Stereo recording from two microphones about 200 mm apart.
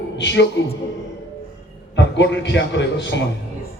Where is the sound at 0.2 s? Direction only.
65° left (ahead or behind).